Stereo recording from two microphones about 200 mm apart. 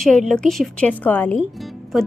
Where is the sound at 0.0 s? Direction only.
Centre (ahead or behind).